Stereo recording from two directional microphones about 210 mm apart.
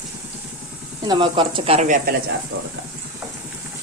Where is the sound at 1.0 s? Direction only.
25° right (ahead or behind).